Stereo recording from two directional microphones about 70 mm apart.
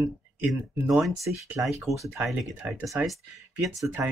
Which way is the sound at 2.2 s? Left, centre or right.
Centre.